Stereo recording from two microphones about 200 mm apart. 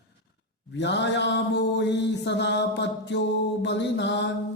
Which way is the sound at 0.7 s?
60° left (ahead or behind).